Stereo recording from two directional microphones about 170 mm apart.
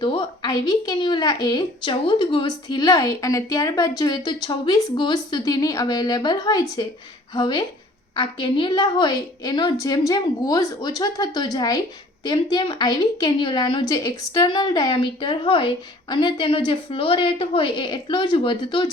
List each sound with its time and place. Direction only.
0.0 s a woman's voice: 30° left (ahead or behind)